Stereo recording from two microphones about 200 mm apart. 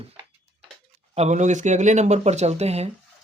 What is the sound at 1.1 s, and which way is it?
Speech, 35° right (ahead or behind).